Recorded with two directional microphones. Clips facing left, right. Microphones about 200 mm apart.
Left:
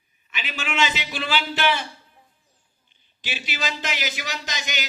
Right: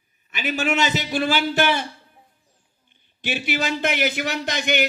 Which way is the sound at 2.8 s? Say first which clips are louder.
Right 8 dB; 55° right (ahead or behind).